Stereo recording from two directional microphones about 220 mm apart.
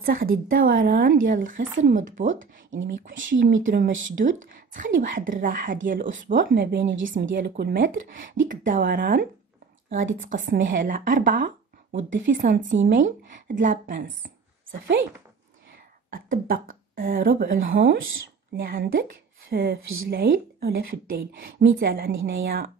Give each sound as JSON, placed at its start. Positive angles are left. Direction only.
{"t": 0.0, "sound": "speech", "side_deg": -40}
{"t": 2.3, "sound": "speech", "side_deg": -60}
{"t": 3.4, "sound": "a woman's voice", "side_deg": -40}
{"t": 7.1, "sound": "speech", "side_deg": -40}
{"t": 16.1, "sound": "a woman's voice", "side_deg": -40}